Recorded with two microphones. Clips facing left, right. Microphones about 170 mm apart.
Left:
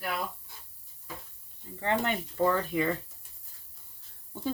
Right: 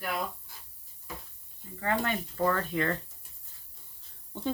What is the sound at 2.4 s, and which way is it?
Speech, 10° left (ahead or behind).